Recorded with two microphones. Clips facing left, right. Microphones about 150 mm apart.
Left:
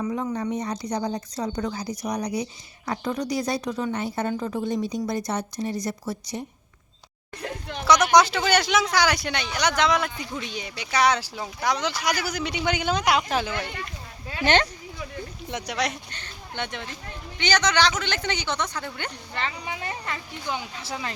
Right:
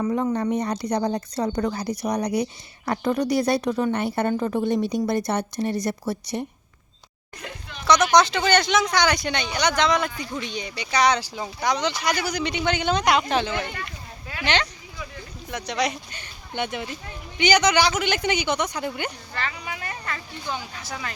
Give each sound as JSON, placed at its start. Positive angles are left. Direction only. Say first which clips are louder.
{"t": 0.0, "sound": "speech", "louder": "right 4 dB", "side_deg": -55}
{"t": 7.9, "sound": "speech", "louder": "even", "side_deg": 10}
{"t": 14.4, "sound": "speech", "louder": "left 3 dB", "side_deg": 45}
{"t": 15.6, "sound": "speech", "louder": "right 3 dB", "side_deg": 0}
{"t": 16.1, "sound": "speech", "louder": "right 3 dB", "side_deg": -10}
{"t": 19.3, "sound": "speech", "louder": "even", "side_deg": 20}